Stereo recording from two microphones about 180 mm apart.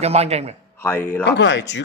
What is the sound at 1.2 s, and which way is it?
Speech, 75° left (ahead or behind).